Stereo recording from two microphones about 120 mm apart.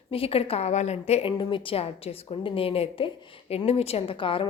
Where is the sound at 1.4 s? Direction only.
45° left (ahead or behind).